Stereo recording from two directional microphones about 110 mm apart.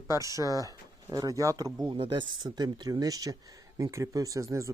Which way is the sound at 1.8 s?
50° right (ahead or behind).